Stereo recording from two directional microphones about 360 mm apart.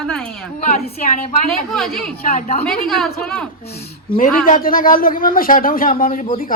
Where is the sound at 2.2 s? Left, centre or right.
Left.